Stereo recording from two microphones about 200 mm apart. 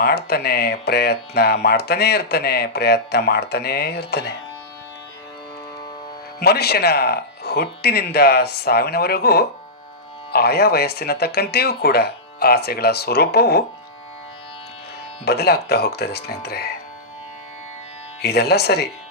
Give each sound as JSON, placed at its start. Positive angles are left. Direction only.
{"t": 0.0, "sound": "speech", "side_deg": 55}
{"t": 6.4, "sound": "speech", "side_deg": 55}
{"t": 15.2, "sound": "speech", "side_deg": 55}
{"t": 18.2, "sound": "speech", "side_deg": 55}